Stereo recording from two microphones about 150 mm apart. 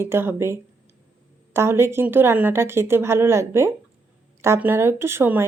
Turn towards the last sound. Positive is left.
turn(degrees=-15)  # may be behind; listen again after turning